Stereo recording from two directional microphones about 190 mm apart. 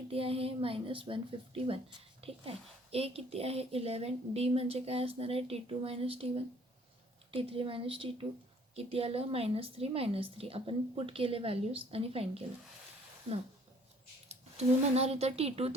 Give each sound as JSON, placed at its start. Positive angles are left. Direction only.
{"t": 0.1, "sound": "a woman's voice", "side_deg": -30}
{"t": 14.3, "sound": "speech", "side_deg": -35}